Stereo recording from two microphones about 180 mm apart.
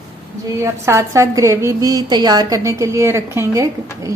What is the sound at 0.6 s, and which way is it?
A woman's voice, 15° right (ahead or behind).